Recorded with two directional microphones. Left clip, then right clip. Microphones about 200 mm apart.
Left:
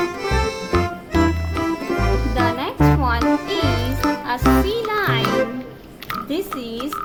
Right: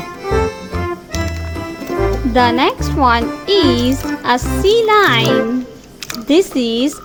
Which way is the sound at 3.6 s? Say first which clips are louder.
Right 8 dB; 40° right (ahead or behind).